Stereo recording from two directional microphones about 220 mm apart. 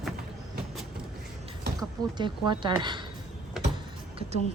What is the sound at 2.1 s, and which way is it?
Speech, 20° right (ahead or behind).